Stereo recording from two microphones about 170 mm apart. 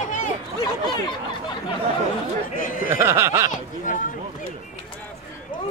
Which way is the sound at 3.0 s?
15° right (ahead or behind).